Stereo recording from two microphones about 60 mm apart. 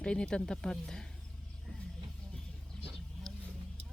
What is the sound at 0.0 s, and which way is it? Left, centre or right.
Speech, centre.